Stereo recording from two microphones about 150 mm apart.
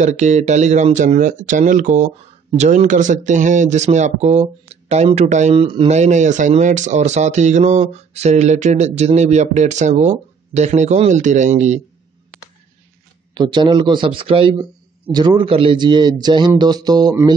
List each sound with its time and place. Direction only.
0.0 s speech: 50° right (ahead or behind)
5.6 s a man's voice: 35° right (ahead or behind)
5.9 s speech: 50° right (ahead or behind)
13.3 s a man's voice: 30° right (ahead or behind)